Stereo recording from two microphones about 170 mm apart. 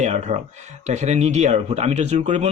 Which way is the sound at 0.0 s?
40° right (ahead or behind).